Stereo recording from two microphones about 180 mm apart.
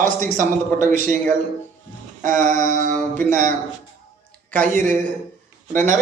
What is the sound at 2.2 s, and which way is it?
Speech, 45° right (ahead or behind).